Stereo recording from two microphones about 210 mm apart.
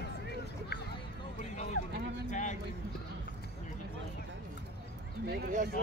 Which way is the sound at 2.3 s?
35° left (ahead or behind).